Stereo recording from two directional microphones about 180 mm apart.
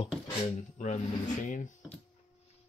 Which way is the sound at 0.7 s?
40° left (ahead or behind).